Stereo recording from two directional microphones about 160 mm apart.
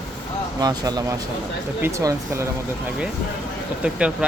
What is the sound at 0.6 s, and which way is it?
Speech, 25° right (ahead or behind).